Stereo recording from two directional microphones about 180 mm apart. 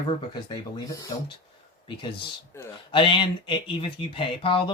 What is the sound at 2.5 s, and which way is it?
Speech, 15° left (ahead or behind).